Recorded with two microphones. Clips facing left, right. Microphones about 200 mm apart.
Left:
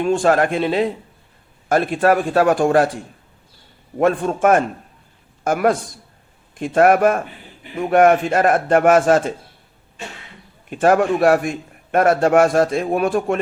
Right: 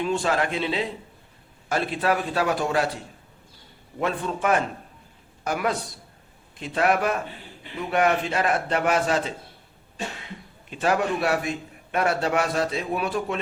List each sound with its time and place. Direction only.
0.0 s a man's voice: 50° left (ahead or behind)
10.7 s a man's voice: 50° left (ahead or behind)